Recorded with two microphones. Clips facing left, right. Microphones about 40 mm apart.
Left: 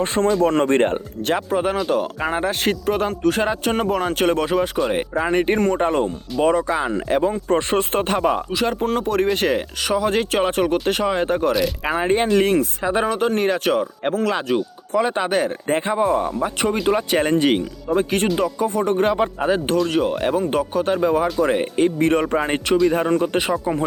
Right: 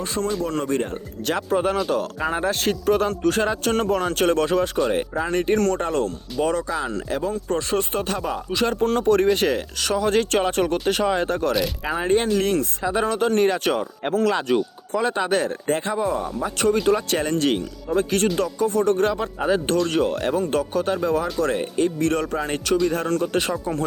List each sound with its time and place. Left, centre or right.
0.0 s speech: left
1.2 s speech: centre
4.9 s speech: left
8.4 s speech: centre
14.9 s speech: centre